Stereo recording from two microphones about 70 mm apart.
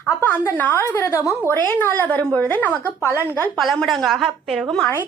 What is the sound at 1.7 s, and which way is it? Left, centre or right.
Speech, left.